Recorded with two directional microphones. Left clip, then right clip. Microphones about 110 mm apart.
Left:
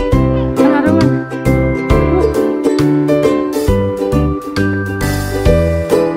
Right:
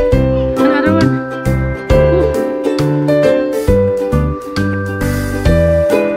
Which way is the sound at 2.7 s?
Centre (ahead or behind).